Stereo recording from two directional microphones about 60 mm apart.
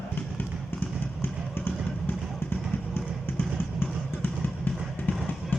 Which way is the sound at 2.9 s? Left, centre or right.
Left.